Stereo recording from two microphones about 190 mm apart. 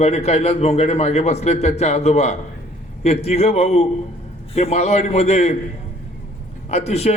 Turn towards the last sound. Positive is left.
turn(degrees=35)  # may be behind; listen again after turning